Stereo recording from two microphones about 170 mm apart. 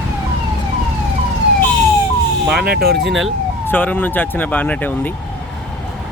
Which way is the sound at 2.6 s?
70° right (ahead or behind).